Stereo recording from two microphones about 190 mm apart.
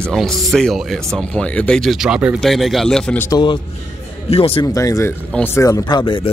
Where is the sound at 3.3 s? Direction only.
25° left (ahead or behind).